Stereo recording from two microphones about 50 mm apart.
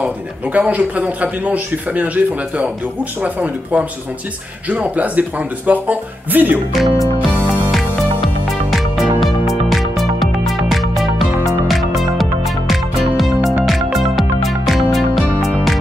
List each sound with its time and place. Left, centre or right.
0.0 s a man's voice: right
6.7 s speech: centre
8.5 s music: centre
14.7 s music: centre